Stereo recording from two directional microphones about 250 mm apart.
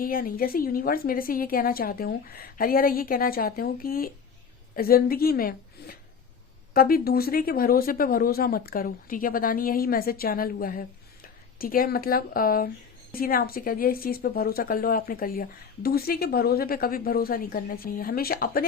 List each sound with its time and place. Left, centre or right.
0.0 s a woman's voice: left